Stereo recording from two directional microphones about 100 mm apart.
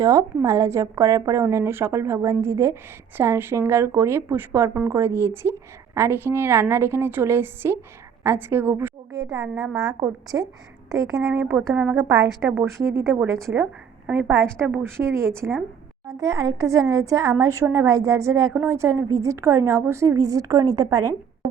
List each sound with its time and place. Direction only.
0.0 s speech: 35° right (ahead or behind)
9.1 s a woman's voice: 40° right (ahead or behind)
9.6 s a woman's voice: 5° right (ahead or behind)
11.2 s a woman's voice: 5° right (ahead or behind)
13.3 s speech: 30° right (ahead or behind)
14.1 s a woman's voice: 15° right (ahead or behind)
16.2 s a woman's voice: 40° right (ahead or behind)
18.5 s a woman's voice: 15° right (ahead or behind)
18.8 s a woman's voice: 30° right (ahead or behind)